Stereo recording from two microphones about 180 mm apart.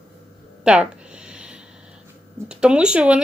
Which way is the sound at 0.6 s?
5° right (ahead or behind).